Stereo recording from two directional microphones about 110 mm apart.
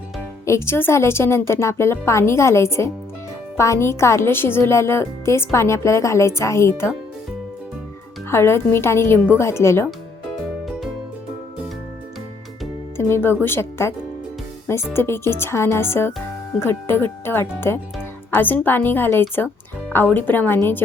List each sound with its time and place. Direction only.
0.4 s speech: 25° left (ahead or behind)
8.3 s speech: 25° left (ahead or behind)
13.0 s speech: 25° left (ahead or behind)
14.9 s a woman's voice: 20° left (ahead or behind)